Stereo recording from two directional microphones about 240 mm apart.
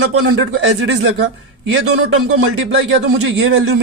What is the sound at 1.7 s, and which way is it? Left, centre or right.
A man's voice, right.